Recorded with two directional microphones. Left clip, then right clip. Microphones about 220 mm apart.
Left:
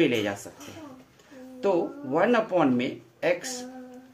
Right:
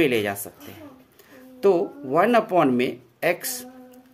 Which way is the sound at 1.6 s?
50° right (ahead or behind).